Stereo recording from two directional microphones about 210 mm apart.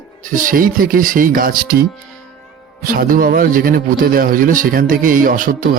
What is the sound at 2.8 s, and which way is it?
A man's voice, 40° right (ahead or behind).